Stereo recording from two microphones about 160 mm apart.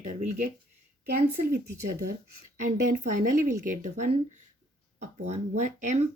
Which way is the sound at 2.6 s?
55° right (ahead or behind).